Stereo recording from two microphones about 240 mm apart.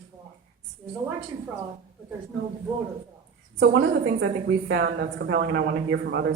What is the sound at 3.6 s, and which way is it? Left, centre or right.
A man's voice, right.